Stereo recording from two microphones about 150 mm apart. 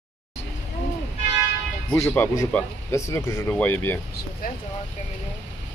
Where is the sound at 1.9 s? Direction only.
5° left (ahead or behind).